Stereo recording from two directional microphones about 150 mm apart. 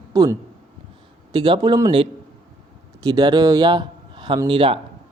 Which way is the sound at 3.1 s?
25° right (ahead or behind).